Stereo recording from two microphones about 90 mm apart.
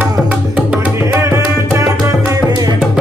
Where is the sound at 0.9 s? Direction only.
30° right (ahead or behind).